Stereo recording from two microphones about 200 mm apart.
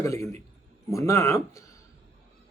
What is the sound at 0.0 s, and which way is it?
Speech, 15° left (ahead or behind).